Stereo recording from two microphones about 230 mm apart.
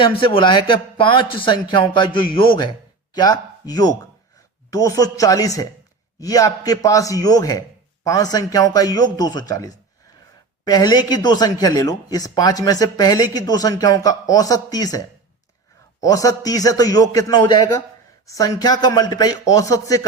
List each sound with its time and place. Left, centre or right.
0.0 s a man's voice: left